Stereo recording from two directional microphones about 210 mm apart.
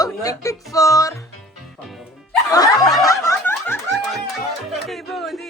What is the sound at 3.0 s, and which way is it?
Snicker, 15° left (ahead or behind).